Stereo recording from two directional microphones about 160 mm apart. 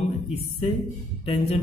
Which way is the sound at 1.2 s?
35° left (ahead or behind).